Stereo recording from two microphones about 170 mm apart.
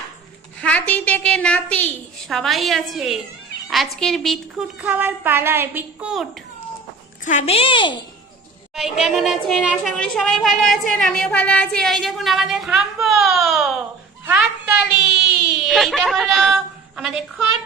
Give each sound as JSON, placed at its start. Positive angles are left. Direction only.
{"t": 0.6, "sound": "a woman's voice", "side_deg": 10}
{"t": 7.3, "sound": "a woman's voice", "side_deg": 40}
{"t": 8.7, "sound": "a woman's voice", "side_deg": 0}